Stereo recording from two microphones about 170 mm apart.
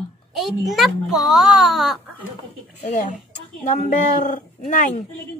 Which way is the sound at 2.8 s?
45° left (ahead or behind).